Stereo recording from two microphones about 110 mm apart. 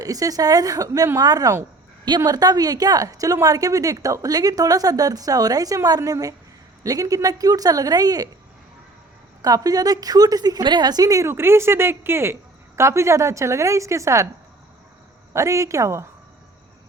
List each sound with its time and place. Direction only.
0.0 s a woman's voice: 35° right (ahead or behind)
9.4 s a woman's voice: 35° right (ahead or behind)
15.3 s a woman's voice: 25° right (ahead or behind)